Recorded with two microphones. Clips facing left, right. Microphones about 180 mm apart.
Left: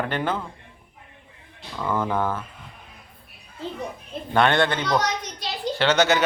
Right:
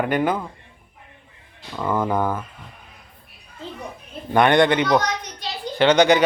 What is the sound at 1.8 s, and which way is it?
Speech, 10° right (ahead or behind).